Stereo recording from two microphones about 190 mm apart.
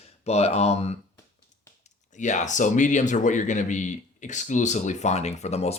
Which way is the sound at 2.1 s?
40° left (ahead or behind).